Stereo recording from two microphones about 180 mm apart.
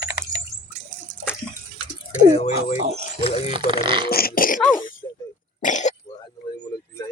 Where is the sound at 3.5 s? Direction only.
30° right (ahead or behind).